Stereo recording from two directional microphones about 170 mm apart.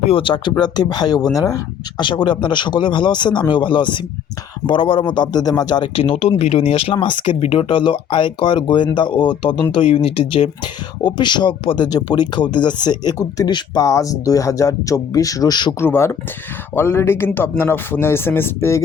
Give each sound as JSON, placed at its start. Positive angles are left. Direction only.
{"t": 0.0, "sound": "speech", "side_deg": 30}